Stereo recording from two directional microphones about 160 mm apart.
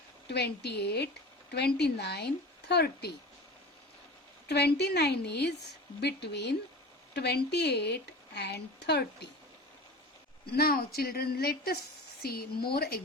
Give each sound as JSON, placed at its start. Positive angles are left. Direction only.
{"t": 0.3, "sound": "a woman's voice", "side_deg": 90}
{"t": 4.4, "sound": "a woman's voice", "side_deg": 90}
{"t": 10.4, "sound": "a woman's voice", "side_deg": 75}